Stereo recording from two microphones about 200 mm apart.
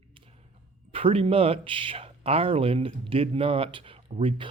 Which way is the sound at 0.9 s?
30° right (ahead or behind).